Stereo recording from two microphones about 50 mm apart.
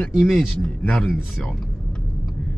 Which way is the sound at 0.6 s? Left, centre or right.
Centre.